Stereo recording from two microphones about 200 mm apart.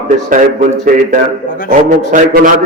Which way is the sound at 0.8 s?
40° right (ahead or behind).